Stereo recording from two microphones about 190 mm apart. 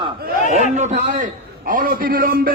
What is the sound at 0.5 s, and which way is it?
A man's voice, 40° right (ahead or behind).